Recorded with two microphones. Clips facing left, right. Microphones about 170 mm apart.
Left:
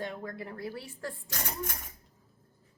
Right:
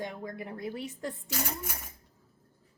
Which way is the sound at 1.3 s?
10° right (ahead or behind).